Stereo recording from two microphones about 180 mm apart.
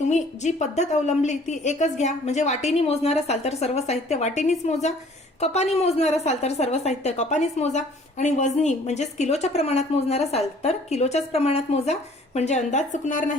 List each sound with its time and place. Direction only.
0.1 s a woman's voice: 40° left (ahead or behind)